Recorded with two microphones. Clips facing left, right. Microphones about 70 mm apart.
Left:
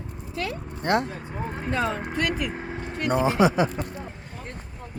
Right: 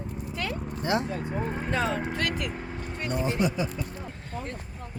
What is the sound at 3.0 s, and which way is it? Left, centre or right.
Speech, left.